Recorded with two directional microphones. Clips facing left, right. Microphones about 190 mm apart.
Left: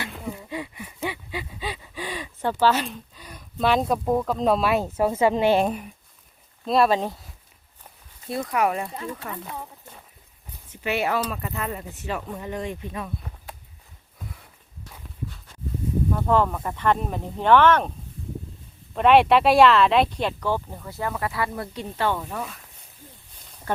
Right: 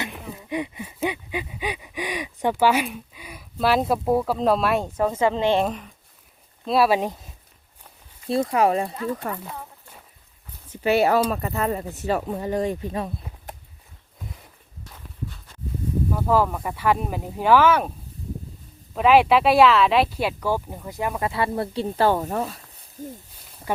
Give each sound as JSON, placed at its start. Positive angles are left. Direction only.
{"t": 0.0, "sound": "a sound", "side_deg": -20}
{"t": 5.2, "sound": "a woman's voice", "side_deg": 10}
{"t": 6.7, "sound": "speech", "side_deg": -5}
{"t": 8.3, "sound": "speech", "side_deg": -30}
{"t": 10.8, "sound": "speech", "side_deg": -35}
{"t": 16.1, "sound": "speech", "side_deg": -5}
{"t": 18.9, "sound": "speech", "side_deg": 0}
{"t": 23.7, "sound": "a sound", "side_deg": -10}